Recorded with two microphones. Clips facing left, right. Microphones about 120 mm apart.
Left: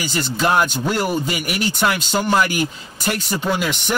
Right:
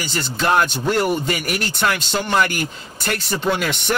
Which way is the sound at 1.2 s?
40° right (ahead or behind).